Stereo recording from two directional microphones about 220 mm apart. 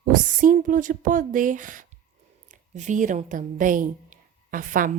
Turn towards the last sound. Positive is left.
turn(degrees=-40)  # may be behind; listen again after turning